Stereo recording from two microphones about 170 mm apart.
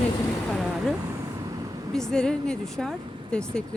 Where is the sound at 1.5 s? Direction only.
20° right (ahead or behind).